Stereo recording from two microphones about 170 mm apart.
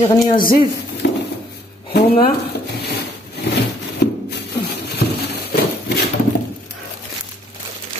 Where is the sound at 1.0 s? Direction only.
70° left (ahead or behind).